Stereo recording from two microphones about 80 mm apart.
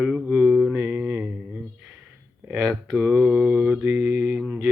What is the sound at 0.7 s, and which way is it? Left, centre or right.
Mantra, centre.